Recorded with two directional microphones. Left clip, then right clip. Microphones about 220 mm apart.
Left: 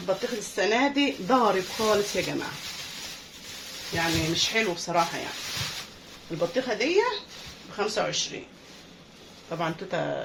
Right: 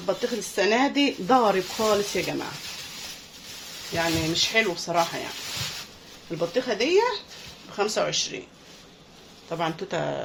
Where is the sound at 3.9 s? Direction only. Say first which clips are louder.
Right 2 dB; 35° right (ahead or behind).